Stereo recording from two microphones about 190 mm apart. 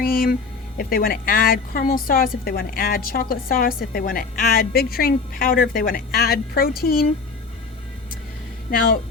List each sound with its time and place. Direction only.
0.0 s a sound: 50° left (ahead or behind)
0.8 s a woman's voice: 50° left (ahead or behind)
8.7 s a woman's voice: 45° left (ahead or behind)